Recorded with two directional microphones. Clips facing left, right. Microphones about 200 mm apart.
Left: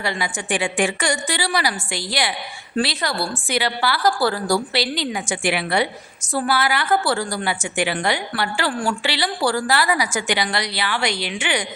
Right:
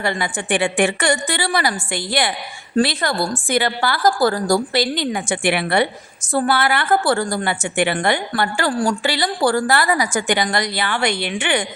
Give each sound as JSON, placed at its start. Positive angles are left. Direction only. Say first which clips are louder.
{"t": 0.0, "sound": "a woman's voice", "louder": "right 3 dB", "side_deg": -55}